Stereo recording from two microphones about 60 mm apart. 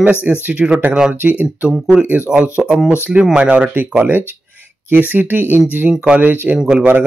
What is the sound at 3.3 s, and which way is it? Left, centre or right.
Speech, right.